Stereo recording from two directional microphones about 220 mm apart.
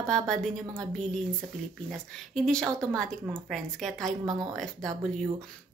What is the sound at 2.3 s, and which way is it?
A woman's voice, 5° left (ahead or behind).